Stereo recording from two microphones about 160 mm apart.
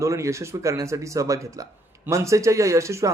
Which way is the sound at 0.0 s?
20° right (ahead or behind).